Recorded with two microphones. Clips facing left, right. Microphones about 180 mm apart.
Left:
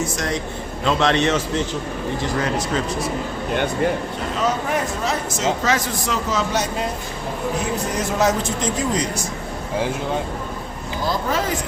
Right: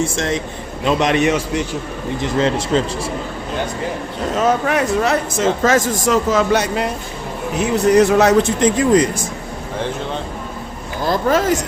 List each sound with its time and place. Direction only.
0.0 s a man's voice: 25° right (ahead or behind)
2.2 s a man's voice: 25° right (ahead or behind)
4.6 s a woman's voice: 70° right (ahead or behind)
5.6 s speech: 45° right (ahead or behind); by 6.8 s 60° right (ahead or behind)
7.9 s speech: 70° right (ahead or behind); by 9.2 s 55° right (ahead or behind)
11.0 s speech: 50° right (ahead or behind)